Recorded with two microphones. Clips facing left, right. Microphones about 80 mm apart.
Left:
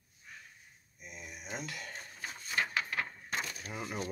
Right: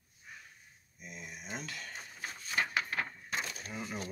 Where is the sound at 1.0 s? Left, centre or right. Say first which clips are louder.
Right 1 dB; centre.